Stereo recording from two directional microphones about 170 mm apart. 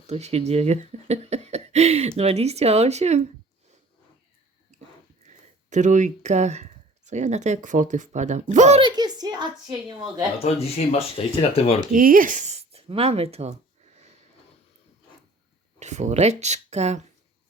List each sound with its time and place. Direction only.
0.1 s speech: 40° right (ahead or behind)
5.3 s speech: 45° right (ahead or behind)
8.8 s a woman's voice: 25° right (ahead or behind)
10.4 s speech: 35° left (ahead or behind)
11.9 s speech: 55° right (ahead or behind); by 13.6 s 40° right (ahead or behind)
15.8 s speech: 45° right (ahead or behind)